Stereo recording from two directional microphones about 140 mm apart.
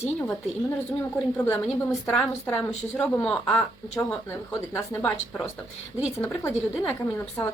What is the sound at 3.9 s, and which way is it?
Speech, 15° left (ahead or behind).